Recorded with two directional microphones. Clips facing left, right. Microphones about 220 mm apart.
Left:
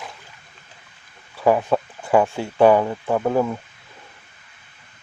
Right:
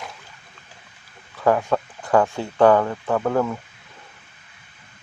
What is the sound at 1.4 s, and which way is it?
Speech, 10° left (ahead or behind).